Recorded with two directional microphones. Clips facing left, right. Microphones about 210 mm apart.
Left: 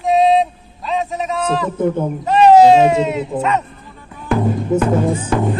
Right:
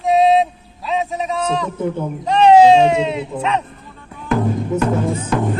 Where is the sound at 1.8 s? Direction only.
50° left (ahead or behind).